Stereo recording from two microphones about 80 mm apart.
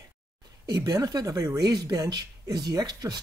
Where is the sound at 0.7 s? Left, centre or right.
Right.